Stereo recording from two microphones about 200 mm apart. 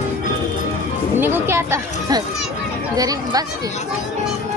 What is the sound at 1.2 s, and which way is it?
Speech, 10° right (ahead or behind).